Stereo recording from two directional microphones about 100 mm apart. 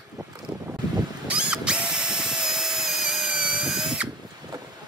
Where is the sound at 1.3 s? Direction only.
10° right (ahead or behind).